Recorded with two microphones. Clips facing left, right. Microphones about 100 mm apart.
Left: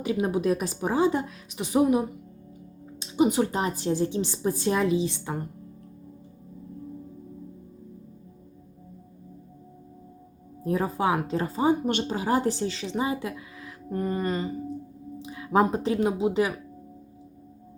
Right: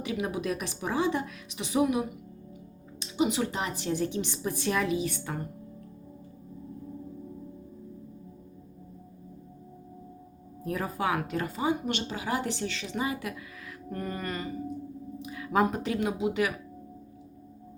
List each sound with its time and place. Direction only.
0.0 s a woman's voice: 35° left (ahead or behind)
3.0 s a sound: 35° left (ahead or behind)
3.2 s a woman's voice: 40° left (ahead or behind)
3.8 s speech: 30° left (ahead or behind)
10.6 s speech: 25° left (ahead or behind)